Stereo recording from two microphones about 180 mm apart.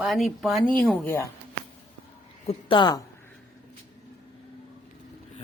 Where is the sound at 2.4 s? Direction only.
25° left (ahead or behind).